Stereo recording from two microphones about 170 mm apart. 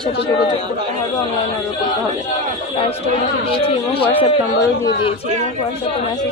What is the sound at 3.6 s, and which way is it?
A man's voice, 35° left (ahead or behind).